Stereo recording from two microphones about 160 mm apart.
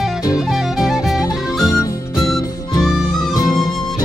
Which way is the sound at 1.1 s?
20° left (ahead or behind).